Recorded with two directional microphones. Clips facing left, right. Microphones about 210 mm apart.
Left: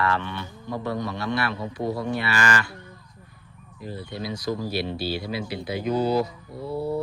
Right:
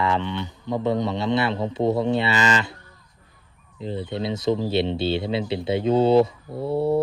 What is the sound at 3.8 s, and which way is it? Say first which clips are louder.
A man's voice: right 6 dB; 20° right (ahead or behind).